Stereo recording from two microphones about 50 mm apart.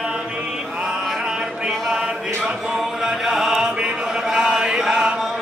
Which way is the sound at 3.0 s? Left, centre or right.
Centre.